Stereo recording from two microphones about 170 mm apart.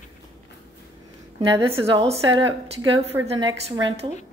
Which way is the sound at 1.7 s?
35° right (ahead or behind).